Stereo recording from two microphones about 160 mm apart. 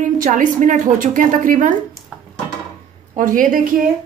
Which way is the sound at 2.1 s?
5° right (ahead or behind).